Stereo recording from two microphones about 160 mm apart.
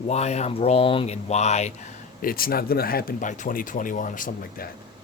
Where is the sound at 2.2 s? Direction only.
65° left (ahead or behind).